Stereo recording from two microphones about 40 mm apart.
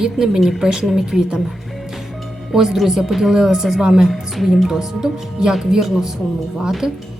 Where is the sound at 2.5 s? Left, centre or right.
Centre.